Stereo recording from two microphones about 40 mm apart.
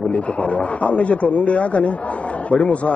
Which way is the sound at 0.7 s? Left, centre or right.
Left.